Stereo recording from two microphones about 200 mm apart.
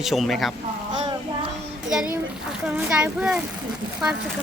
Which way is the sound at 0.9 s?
20° right (ahead or behind).